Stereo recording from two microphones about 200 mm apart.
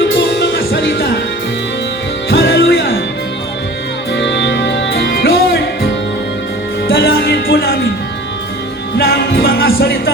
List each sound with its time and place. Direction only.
0.3 s music: 55° left (ahead or behind)
2.3 s music: 50° left (ahead or behind)
4.1 s music: 60° left (ahead or behind)
6.8 s music: 50° left (ahead or behind)
9.0 s music: 50° left (ahead or behind)